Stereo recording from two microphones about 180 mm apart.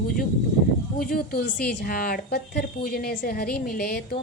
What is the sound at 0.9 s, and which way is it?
A woman's voice, 55° left (ahead or behind).